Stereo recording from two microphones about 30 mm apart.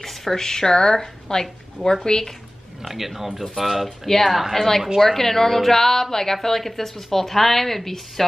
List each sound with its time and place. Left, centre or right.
0.0 s speech: centre
2.0 s speech: left
2.8 s speech: centre
4.6 s speech: centre